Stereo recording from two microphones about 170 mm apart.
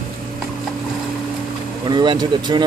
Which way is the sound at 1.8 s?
25° right (ahead or behind).